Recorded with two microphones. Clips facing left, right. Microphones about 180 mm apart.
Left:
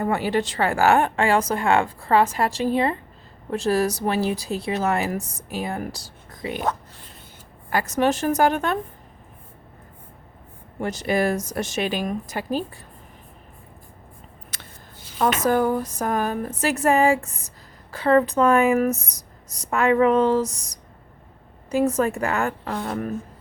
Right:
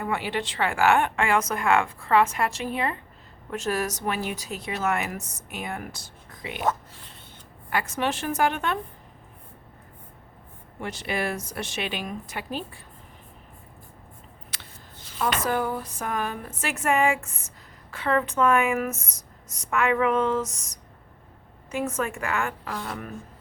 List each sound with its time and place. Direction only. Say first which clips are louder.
0.0 s speech: left 6 dB; 40° left (ahead or behind)
7.7 s speech: left 6 dB; 40° left (ahead or behind)
10.8 s speech: left 7 dB; 40° left (ahead or behind)
14.5 s a sound: left 3 dB; 45° left (ahead or behind)
15.2 s speech: left 6 dB; 45° left (ahead or behind)